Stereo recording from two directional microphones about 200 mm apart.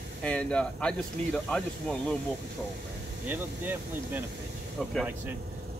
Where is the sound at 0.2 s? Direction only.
5° left (ahead or behind).